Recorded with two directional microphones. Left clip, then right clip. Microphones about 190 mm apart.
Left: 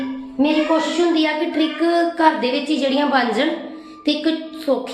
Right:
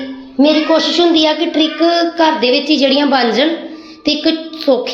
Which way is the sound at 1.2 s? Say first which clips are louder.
Right 6 dB; 25° right (ahead or behind).